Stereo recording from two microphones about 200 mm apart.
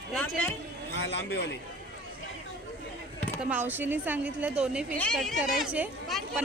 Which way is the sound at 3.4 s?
10° right (ahead or behind).